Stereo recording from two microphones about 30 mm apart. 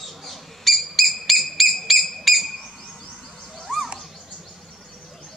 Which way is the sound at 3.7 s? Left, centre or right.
Centre.